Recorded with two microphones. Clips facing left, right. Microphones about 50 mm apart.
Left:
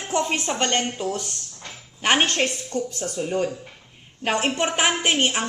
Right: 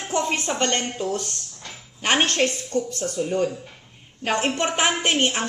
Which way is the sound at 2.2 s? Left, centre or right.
Centre.